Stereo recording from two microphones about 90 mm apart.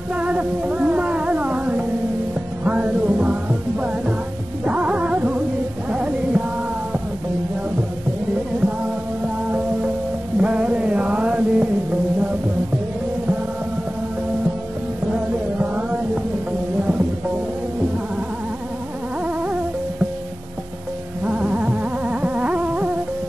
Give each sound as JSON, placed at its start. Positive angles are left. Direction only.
{"t": 0.1, "sound": "music", "side_deg": -15}
{"t": 10.4, "sound": "music", "side_deg": -15}
{"t": 19.2, "sound": "music", "side_deg": -15}
{"t": 21.2, "sound": "a sound", "side_deg": -15}